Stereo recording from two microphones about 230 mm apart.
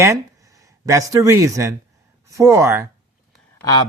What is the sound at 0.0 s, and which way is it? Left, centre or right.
Speech, centre.